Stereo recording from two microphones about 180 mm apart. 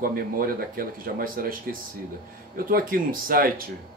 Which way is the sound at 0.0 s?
55° right (ahead or behind).